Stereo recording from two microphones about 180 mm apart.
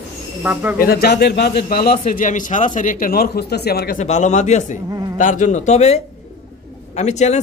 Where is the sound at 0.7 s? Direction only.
60° left (ahead or behind).